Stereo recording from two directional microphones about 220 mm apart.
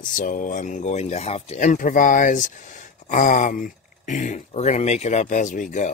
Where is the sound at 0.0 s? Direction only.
35° left (ahead or behind).